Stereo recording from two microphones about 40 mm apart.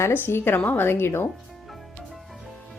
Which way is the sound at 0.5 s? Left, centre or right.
Left.